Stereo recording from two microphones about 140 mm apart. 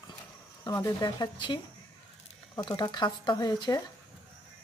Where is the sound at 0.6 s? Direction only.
30° left (ahead or behind).